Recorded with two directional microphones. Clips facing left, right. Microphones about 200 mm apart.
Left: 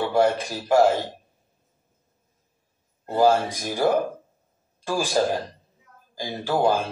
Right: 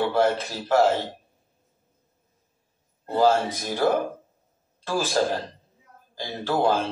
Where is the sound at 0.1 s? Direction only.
15° left (ahead or behind).